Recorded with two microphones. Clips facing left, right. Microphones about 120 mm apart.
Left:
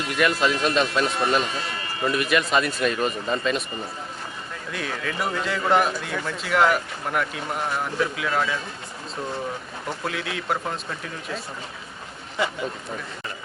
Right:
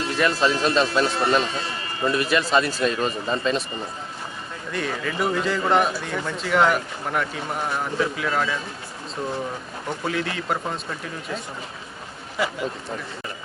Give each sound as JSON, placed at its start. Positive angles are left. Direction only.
{"t": 0.0, "sound": "speech", "side_deg": -30}
{"t": 4.7, "sound": "a man's voice", "side_deg": 0}
{"t": 10.0, "sound": "a man's voice", "side_deg": 0}